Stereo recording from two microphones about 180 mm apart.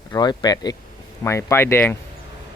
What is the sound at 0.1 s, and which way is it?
Speech, 25° left (ahead or behind).